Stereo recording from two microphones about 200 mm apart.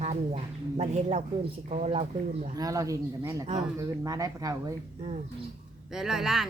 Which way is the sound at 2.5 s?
15° right (ahead or behind).